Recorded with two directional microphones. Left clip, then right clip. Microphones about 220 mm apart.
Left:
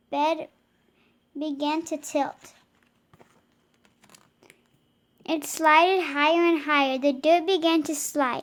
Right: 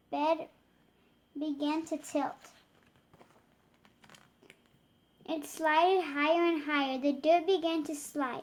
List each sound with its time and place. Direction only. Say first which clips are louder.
0.1 s a child's voice: left 6 dB; 35° left (ahead or behind)
3.8 s a sound: left 2 dB; 30° left (ahead or behind)
5.2 s a woman's voice: left 9 dB; 40° left (ahead or behind)